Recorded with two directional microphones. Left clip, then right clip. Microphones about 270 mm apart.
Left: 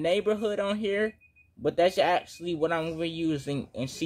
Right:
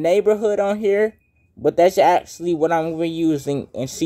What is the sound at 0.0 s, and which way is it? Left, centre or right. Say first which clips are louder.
Speech: right 10 dB; right.